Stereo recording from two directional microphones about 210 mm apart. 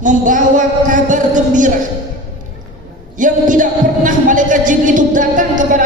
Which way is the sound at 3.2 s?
40° right (ahead or behind).